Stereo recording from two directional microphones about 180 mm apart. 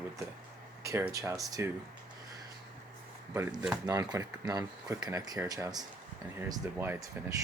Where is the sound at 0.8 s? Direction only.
15° right (ahead or behind).